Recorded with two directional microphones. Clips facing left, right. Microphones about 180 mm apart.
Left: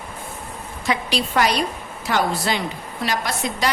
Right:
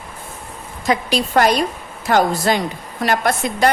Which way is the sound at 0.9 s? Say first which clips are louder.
Right 5 dB; 45° right (ahead or behind).